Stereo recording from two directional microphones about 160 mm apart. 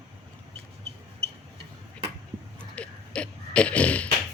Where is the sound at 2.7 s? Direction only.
5° left (ahead or behind).